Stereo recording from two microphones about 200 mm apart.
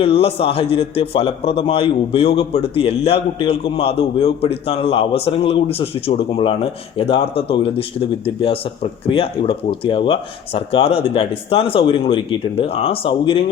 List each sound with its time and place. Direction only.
0.0 s a man's voice: 30° left (ahead or behind)